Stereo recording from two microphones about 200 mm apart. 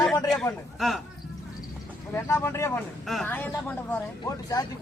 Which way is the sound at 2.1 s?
15° left (ahead or behind).